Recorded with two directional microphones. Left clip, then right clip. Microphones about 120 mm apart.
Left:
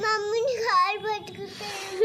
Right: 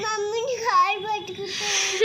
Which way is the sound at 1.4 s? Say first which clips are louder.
Right 10 dB; 55° left (ahead or behind).